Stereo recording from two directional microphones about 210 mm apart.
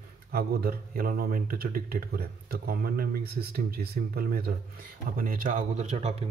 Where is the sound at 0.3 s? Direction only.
45° right (ahead or behind).